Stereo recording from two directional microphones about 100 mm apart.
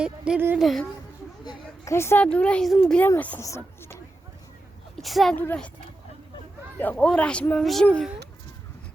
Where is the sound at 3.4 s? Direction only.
25° left (ahead or behind).